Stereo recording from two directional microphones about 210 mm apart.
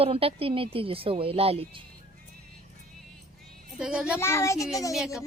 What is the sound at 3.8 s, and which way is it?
Speech, 5° right (ahead or behind).